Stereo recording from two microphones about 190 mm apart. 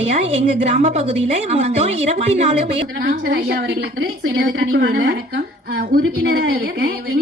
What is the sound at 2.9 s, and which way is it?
A woman's voice, 45° right (ahead or behind).